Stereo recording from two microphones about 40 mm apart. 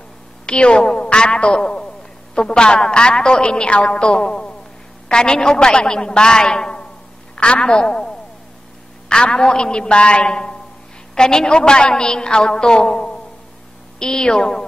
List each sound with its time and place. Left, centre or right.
0.5 s a woman's voice: left
9.1 s a woman's voice: centre